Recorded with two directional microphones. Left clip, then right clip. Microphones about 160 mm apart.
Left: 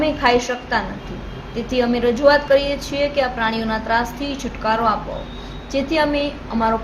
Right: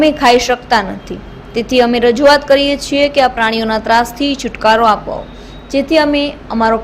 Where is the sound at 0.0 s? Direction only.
60° right (ahead or behind).